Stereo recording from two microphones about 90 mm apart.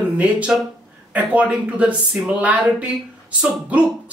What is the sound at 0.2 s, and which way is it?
Speech, 15° right (ahead or behind).